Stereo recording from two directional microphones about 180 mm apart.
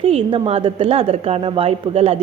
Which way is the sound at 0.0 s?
30° right (ahead or behind).